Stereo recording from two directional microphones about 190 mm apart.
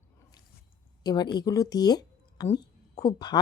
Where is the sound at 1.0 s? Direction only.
20° left (ahead or behind).